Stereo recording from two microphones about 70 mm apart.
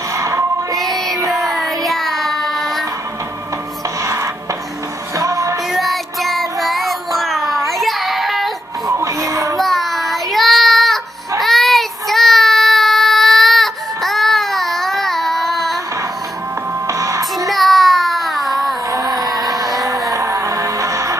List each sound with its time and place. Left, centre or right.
0.2 s music: right
0.7 s music: centre
1.3 s child singing: centre
4.0 s music: right
5.7 s child singing: centre
8.8 s music: right
9.6 s child singing: centre
16.8 s music: right
17.5 s child singing: centre
18.9 s music: right